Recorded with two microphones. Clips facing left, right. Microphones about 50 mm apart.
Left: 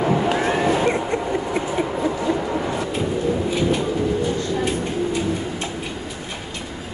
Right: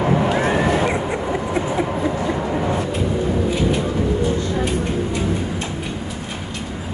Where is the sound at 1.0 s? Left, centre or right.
Centre.